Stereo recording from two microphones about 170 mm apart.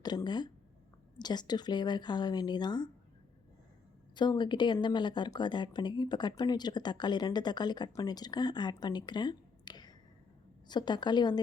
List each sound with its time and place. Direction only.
0.0 s speech: 25° left (ahead or behind)
4.1 s speech: 25° left (ahead or behind)